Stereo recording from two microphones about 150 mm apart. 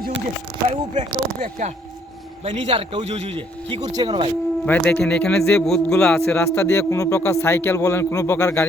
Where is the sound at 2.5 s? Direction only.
40° right (ahead or behind).